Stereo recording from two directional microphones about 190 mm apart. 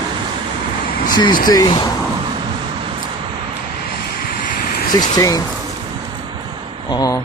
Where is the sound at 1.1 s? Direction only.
25° left (ahead or behind).